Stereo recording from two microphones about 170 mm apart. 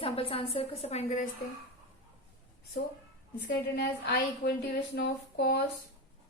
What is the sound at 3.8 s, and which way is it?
Speech, 70° left (ahead or behind).